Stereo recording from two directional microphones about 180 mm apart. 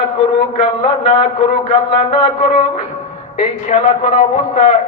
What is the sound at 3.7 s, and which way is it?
A man's voice, 40° left (ahead or behind).